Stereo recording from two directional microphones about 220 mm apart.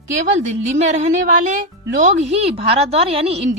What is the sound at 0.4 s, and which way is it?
A woman's voice, 30° right (ahead or behind).